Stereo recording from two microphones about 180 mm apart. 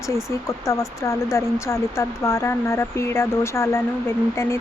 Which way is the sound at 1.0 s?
15° left (ahead or behind).